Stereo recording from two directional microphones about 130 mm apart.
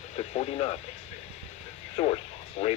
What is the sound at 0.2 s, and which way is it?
Speech, 50° left (ahead or behind).